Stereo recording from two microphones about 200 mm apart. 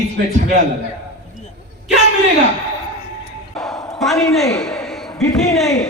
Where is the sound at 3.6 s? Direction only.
Centre (ahead or behind).